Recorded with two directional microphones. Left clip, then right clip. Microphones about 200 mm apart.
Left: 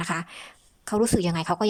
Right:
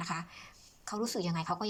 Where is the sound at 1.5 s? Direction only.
35° left (ahead or behind).